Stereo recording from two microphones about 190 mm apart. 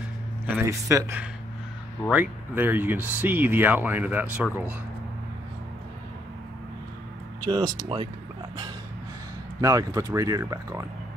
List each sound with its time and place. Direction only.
0.7 s speech: 15° right (ahead or behind)
7.4 s speech: 20° right (ahead or behind)
9.6 s speech: 15° right (ahead or behind)